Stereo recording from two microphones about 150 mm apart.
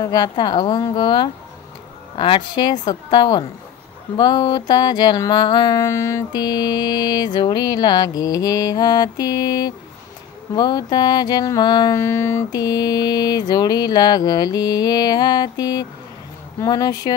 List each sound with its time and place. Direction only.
0.0 s a woman's voice: 25° left (ahead or behind)
2.1 s mantra: 35° left (ahead or behind)